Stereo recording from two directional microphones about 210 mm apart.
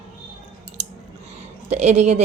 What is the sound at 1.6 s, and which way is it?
Speech, 30° right (ahead or behind).